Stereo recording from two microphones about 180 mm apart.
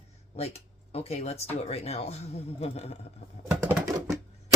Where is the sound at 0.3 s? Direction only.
35° left (ahead or behind).